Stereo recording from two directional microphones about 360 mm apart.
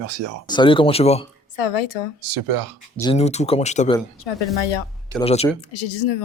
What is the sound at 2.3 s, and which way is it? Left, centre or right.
Speech, right.